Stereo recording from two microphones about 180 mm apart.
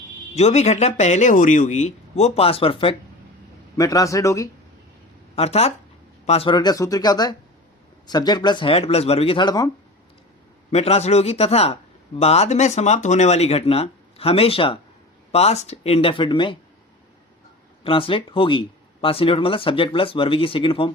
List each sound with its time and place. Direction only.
0.3 s speech: 40° left (ahead or behind)
3.8 s a man's voice: 20° left (ahead or behind)
5.4 s speech: 35° left (ahead or behind)
10.7 s speech: 35° left (ahead or behind)
17.8 s speech: 30° left (ahead or behind)